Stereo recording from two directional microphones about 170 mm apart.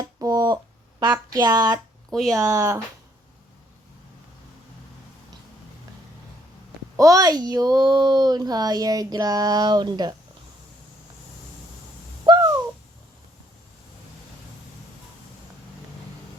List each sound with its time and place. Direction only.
0.0 s a sound: 20° right (ahead or behind)
2.0 s speech: centre (ahead or behind)
2.3 s speech: 20° right (ahead or behind)
6.9 s speech: 20° right (ahead or behind)
12.2 s owl: 25° right (ahead or behind)